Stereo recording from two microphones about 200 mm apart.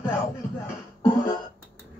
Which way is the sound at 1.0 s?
20° left (ahead or behind).